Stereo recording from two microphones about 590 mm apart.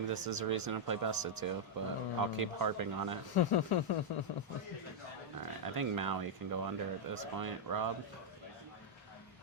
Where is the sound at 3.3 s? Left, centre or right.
Left.